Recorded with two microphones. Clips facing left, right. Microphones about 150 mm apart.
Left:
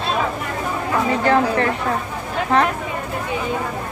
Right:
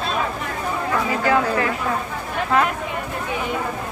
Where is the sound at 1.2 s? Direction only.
30° left (ahead or behind).